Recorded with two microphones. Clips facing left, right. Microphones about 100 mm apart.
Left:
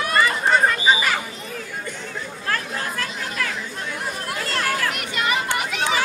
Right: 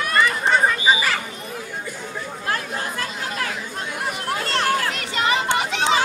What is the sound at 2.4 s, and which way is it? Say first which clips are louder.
Chatter: even; 30° right (ahead or behind).